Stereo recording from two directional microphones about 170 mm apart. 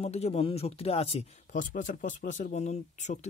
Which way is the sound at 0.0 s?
35° left (ahead or behind).